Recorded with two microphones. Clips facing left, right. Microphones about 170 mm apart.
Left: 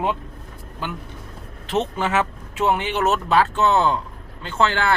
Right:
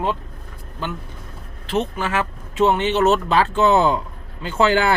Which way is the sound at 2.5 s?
10° left (ahead or behind).